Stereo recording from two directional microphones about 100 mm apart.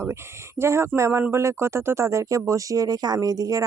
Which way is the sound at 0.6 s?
25° right (ahead or behind).